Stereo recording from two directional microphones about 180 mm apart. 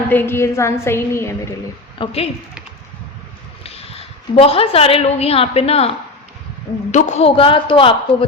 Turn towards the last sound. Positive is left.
turn(degrees=30)  # may be behind; listen again after turning